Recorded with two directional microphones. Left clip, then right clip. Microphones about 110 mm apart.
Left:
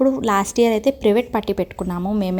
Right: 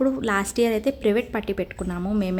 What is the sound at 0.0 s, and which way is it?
A woman's voice, 30° left (ahead or behind).